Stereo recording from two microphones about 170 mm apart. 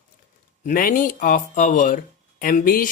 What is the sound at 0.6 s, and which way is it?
Speech, 55° left (ahead or behind).